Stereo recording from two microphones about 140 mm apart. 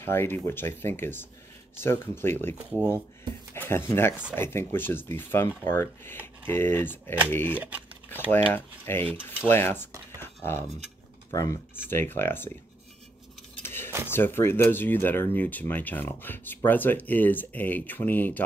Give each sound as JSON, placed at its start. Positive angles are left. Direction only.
{"t": 0.0, "sound": "speech", "side_deg": 15}
{"t": 3.5, "sound": "speech", "side_deg": 15}
{"t": 7.5, "sound": "speech", "side_deg": -10}
{"t": 8.5, "sound": "speech", "side_deg": 15}
{"t": 10.1, "sound": "a sound", "side_deg": 15}
{"t": 11.2, "sound": "speech", "side_deg": 20}
{"t": 13.6, "sound": "cutlery", "side_deg": 15}
{"t": 14.1, "sound": "speech", "side_deg": 15}